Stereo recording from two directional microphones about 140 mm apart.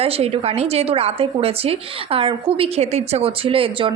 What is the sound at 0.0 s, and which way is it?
A woman's voice, 45° right (ahead or behind).